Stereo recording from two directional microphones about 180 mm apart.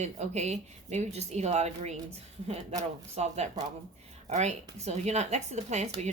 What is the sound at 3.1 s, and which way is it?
A woman's voice, 35° right (ahead or behind).